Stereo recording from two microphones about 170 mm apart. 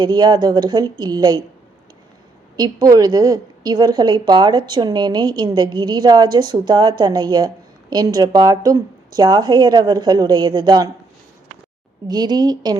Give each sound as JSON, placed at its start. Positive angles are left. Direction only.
{"t": 0.0, "sound": "a woman's voice", "side_deg": -25}
{"t": 2.6, "sound": "a woman's voice", "side_deg": -20}
{"t": 12.0, "sound": "a woman's voice", "side_deg": -25}